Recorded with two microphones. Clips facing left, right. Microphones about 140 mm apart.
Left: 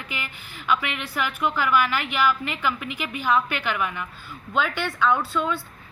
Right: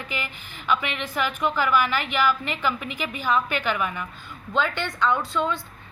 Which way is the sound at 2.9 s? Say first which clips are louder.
Left 4 dB; 15° left (ahead or behind).